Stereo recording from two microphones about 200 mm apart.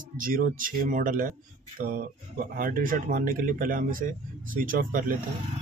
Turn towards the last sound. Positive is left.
turn(degrees=-45)  # may be behind; listen again after turning